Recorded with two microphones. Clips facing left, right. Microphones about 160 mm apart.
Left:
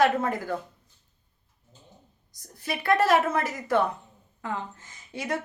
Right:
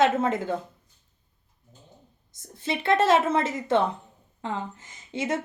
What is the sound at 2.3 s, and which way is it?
A woman's voice, 25° right (ahead or behind).